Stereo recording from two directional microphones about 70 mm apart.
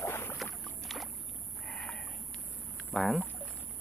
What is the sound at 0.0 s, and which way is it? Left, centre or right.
Boat, left.